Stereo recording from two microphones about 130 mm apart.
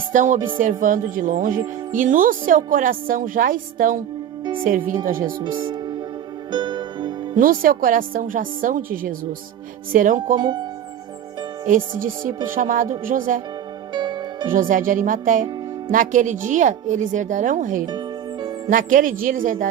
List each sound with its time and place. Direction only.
0.1 s music: 80° right
0.3 s speech: 40° right (ahead or behind)
0.6 s a woman's voice: 90° right
5.4 s speech: 35° right (ahead or behind)
6.5 s music: 35° right (ahead or behind)
7.3 s a woman's voice: 90° right
10.4 s speech: 35° right (ahead or behind)
11.6 s a woman's voice: 85° right
13.9 s music: 35° right (ahead or behind)
14.5 s a woman's voice: 90° right
17.8 s music: 35° right (ahead or behind)
18.7 s a woman's voice: 90° right